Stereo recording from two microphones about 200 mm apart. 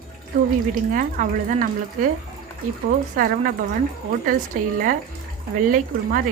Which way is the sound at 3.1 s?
45° right (ahead or behind).